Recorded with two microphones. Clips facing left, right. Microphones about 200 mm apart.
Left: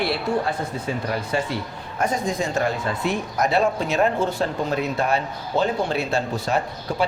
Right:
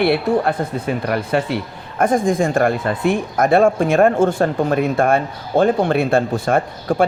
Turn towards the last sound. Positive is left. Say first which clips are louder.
# right 6 dB
turn(degrees=-50)  # may be behind; listen again after turning